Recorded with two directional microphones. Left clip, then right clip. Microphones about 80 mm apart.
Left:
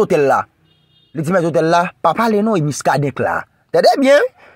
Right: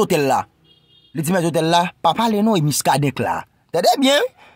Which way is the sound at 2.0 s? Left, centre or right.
Centre.